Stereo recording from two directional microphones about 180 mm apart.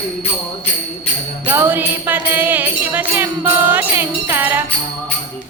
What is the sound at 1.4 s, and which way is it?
Music, 10° right (ahead or behind).